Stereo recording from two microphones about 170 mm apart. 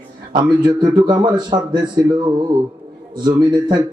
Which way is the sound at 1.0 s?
25° right (ahead or behind).